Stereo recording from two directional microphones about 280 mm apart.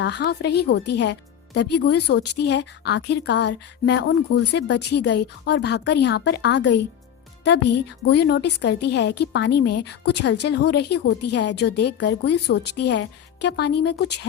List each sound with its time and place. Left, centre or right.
0.0 s a woman's voice: left